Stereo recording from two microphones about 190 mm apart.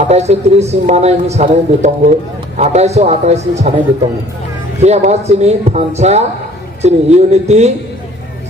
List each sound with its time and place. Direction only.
0.0 s speech: 35° right (ahead or behind)